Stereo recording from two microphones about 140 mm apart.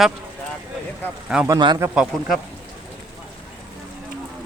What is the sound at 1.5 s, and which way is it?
Speech, 30° right (ahead or behind).